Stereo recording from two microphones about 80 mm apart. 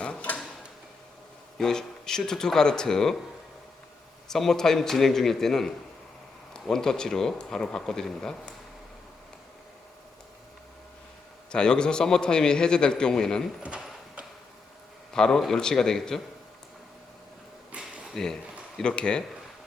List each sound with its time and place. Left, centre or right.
0.0 s tick-tock: centre
1.5 s a man's voice: centre
4.3 s a man's voice: centre
11.5 s a man's voice: centre
13.6 s speech: centre
15.1 s a man's voice: centre
17.7 s a sound: centre
18.0 s a sound: centre
18.8 s a man's voice: centre